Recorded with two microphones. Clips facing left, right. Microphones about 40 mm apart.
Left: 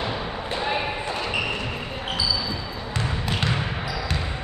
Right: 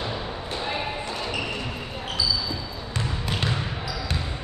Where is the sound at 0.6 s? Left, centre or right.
Left.